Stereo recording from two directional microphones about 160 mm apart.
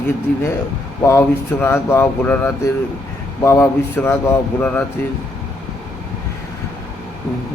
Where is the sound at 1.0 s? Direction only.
15° left (ahead or behind).